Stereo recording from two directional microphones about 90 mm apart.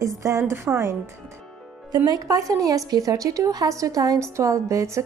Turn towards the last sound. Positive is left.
turn(degrees=-35)  # may be behind; listen again after turning